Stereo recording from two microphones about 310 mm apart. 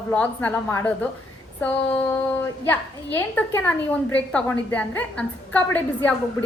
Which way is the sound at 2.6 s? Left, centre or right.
Centre.